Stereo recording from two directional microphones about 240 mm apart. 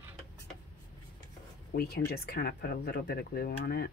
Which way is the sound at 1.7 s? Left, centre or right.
Left.